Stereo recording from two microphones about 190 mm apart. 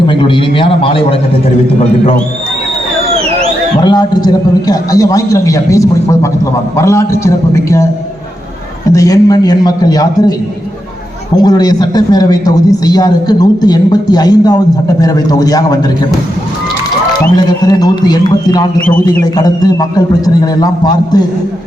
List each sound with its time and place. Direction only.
0.1 s a man's voice: 25° left (ahead or behind)
3.8 s a man's voice: 20° left (ahead or behind)
8.9 s a man's voice: 20° left (ahead or behind)
11.4 s a man's voice: 20° left (ahead or behind)
17.3 s a man's voice: 20° left (ahead or behind)